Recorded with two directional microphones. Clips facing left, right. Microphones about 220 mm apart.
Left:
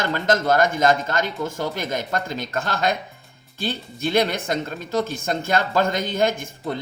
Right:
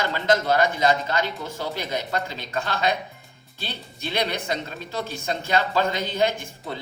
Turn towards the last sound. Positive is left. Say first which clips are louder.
# left 3 dB
turn(degrees=50)  # may be behind; listen again after turning